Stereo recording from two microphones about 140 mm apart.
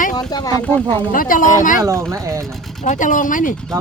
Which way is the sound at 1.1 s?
80° left.